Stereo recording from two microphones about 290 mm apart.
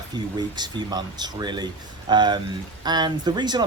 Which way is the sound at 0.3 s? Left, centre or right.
Centre.